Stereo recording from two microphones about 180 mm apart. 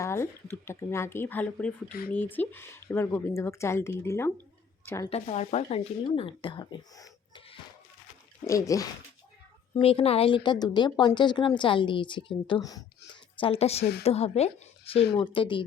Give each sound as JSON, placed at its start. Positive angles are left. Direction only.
{"t": 0.0, "sound": "speech", "side_deg": 15}
{"t": 1.9, "sound": "speech", "side_deg": 55}
{"t": 2.1, "sound": "speech", "side_deg": 10}
{"t": 5.0, "sound": "speech", "side_deg": 35}
{"t": 8.4, "sound": "speech", "side_deg": 20}
{"t": 9.8, "sound": "speech", "side_deg": 30}
{"t": 13.4, "sound": "speech", "side_deg": 35}